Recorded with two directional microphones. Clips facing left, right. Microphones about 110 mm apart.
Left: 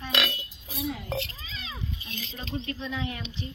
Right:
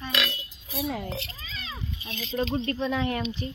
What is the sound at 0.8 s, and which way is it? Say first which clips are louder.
Speech: right 3 dB; 90° right.